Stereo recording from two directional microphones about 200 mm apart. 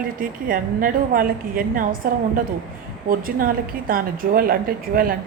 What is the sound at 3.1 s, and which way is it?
Speech, 45° right (ahead or behind).